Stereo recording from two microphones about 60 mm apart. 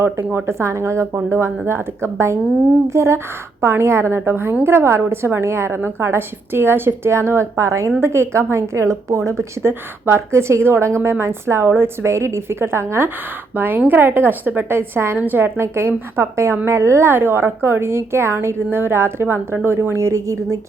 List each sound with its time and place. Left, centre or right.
0.4 s a woman's voice: right
13.6 s a woman's voice: right